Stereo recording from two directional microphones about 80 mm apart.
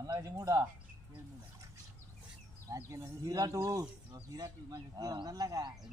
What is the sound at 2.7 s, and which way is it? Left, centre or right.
A man's voice, right.